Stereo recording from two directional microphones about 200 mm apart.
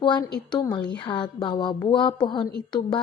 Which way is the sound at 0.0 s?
20° left (ahead or behind).